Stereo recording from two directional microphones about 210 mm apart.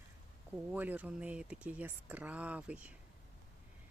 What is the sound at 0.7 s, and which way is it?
Speech, 10° right (ahead or behind).